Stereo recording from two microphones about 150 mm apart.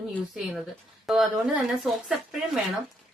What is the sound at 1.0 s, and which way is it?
A woman's voice, centre (ahead or behind).